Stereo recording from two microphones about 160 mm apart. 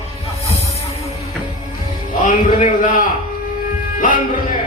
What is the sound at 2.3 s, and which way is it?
A man's voice, 55° left (ahead or behind).